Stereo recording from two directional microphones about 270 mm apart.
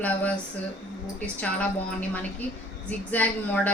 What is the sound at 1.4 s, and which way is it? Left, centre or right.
A woman's voice, centre.